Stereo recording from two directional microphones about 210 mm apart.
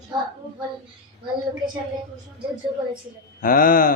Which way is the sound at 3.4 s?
40° left (ahead or behind).